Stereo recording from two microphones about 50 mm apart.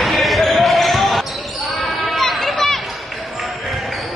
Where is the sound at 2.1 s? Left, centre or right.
Centre.